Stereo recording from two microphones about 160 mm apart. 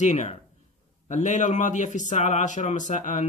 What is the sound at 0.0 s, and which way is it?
Speech, 45° left (ahead or behind).